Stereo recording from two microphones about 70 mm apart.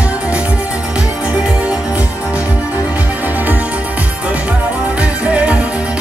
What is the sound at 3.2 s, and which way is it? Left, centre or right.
Music, right.